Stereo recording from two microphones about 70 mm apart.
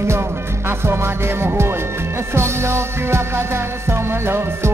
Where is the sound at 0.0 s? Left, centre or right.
Right.